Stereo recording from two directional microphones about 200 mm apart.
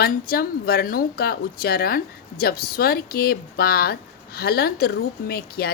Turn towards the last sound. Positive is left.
turn(degrees=50)  # may be behind; listen again after turning